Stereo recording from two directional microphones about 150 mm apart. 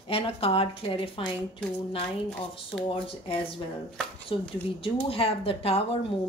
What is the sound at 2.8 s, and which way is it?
A woman's voice, 40° left (ahead or behind).